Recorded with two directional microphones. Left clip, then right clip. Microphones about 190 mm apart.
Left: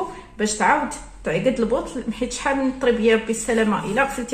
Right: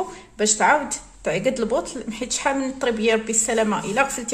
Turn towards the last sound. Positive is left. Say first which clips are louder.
# even
turn(degrees=-60)  # may be behind; listen again after turning